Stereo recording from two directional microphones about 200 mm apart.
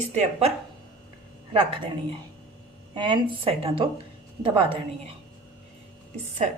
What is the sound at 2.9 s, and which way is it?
Speech, 20° right (ahead or behind).